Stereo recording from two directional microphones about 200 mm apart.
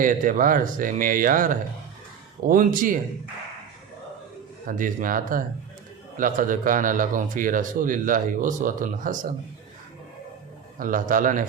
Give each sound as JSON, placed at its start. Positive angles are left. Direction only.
{"t": 0.0, "sound": "speech", "side_deg": -40}
{"t": 4.6, "sound": "a man's voice", "side_deg": -40}
{"t": 10.8, "sound": "a man's voice", "side_deg": -40}